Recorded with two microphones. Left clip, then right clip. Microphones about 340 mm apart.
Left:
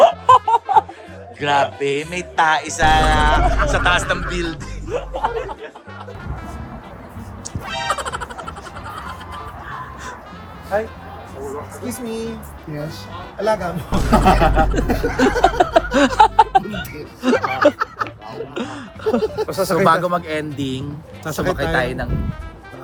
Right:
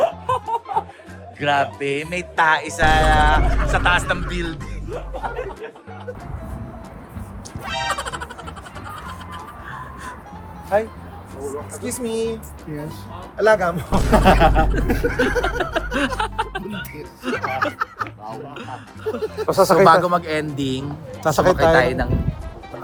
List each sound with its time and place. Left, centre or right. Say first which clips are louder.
0.0 s music: left 9 dB; left
1.4 s speech: left 2 dB; centre
1.8 s a sound: left 2 dB; centre
5.2 s speech: left 7 dB; left
7.6 s music: left 1 dB; centre
11.9 s speech: right 4 dB; right
13.9 s a sound: left 1 dB; centre
14.8 s music: left 2 dB; centre
17.2 s snicker: left 7 dB; centre
18.5 s speech: left 5 dB; centre
19.5 s speech: right 10 dB; centre
19.9 s a sound: right 2 dB; centre
21.2 s speech: right 6 dB; centre
21.8 s a sound: right 3 dB; centre